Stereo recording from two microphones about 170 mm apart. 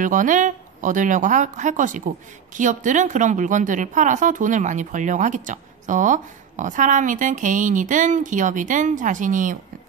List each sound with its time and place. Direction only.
0.0 s speech: 50° right (ahead or behind)